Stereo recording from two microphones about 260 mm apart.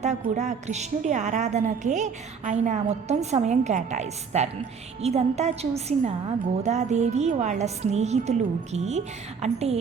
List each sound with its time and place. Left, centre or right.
0.0 s a woman's voice: right